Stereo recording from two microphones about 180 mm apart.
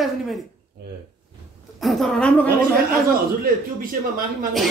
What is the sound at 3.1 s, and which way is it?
A man's voice, 55° right (ahead or behind).